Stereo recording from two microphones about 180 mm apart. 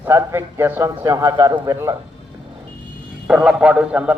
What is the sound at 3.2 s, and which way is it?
Speech, 5° right (ahead or behind).